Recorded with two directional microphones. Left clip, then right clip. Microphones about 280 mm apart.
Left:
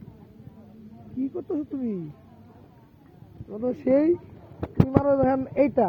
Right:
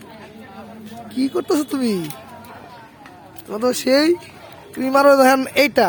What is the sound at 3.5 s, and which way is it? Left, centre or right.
Speech, right.